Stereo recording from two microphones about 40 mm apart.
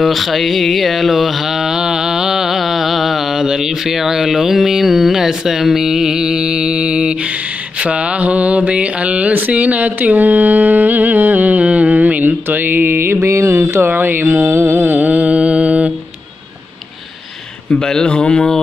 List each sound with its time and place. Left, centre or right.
0.0 s a sound: centre
3.4 s speech: centre
7.8 s a sound: right
9.5 s mantra: right
13.9 s speech: right
14.5 s mantra: right
14.8 s mantra: right
17.6 s speech: centre